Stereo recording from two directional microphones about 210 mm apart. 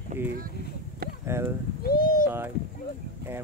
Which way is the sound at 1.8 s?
45° left (ahead or behind).